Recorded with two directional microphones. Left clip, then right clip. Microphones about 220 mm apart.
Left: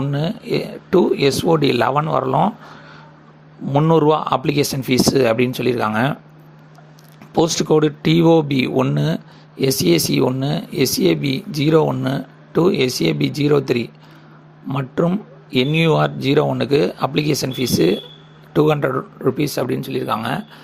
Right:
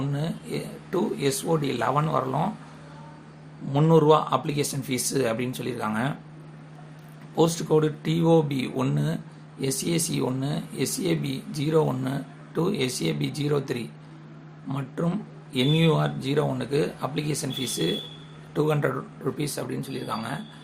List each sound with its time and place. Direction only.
0.0 s speech: 35° left (ahead or behind)
3.7 s speech: 30° left (ahead or behind)
7.3 s speech: 30° left (ahead or behind)